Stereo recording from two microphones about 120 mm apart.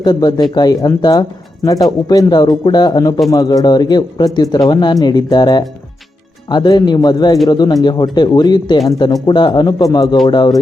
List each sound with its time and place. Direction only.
0.0 s speech: 35° left (ahead or behind)